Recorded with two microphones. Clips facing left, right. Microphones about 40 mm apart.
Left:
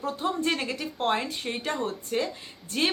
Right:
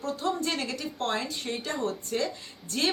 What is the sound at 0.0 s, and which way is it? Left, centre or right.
Speech, left.